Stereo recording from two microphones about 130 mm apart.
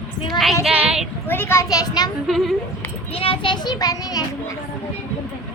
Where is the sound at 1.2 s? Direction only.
15° left (ahead or behind); by 2.1 s 30° left (ahead or behind).